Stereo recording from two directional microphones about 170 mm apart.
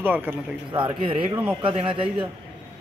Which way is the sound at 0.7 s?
30° right (ahead or behind).